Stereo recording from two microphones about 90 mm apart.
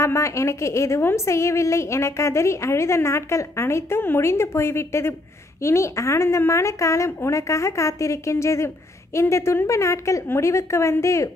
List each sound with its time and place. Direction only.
0.0 s a woman's voice: 30° left (ahead or behind)